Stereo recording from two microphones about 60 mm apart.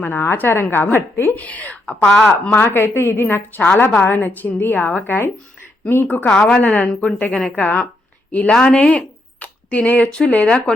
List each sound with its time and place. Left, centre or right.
0.0 s a woman's voice: left
1.4 s a woman's voice: left
2.6 s a woman's voice: left; by 10.8 s centre